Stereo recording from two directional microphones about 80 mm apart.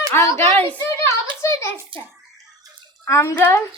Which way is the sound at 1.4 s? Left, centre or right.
Left.